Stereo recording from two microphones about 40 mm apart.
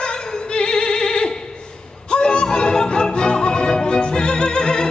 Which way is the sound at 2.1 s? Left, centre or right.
Left.